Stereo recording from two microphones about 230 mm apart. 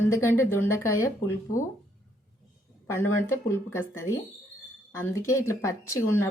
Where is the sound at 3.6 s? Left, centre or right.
Centre.